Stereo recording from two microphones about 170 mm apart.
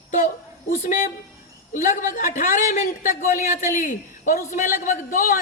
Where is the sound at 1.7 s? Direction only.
50° left (ahead or behind).